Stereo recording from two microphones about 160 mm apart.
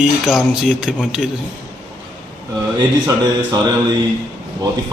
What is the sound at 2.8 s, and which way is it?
Speech, 25° right (ahead or behind).